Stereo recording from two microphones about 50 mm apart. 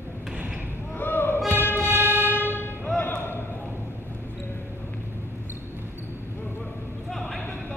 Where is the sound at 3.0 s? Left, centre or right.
Left.